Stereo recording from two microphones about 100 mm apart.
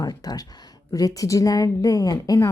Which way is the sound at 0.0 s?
40° left (ahead or behind).